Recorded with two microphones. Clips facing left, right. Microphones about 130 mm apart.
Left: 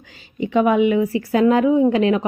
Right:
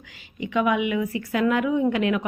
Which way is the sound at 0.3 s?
35° left (ahead or behind).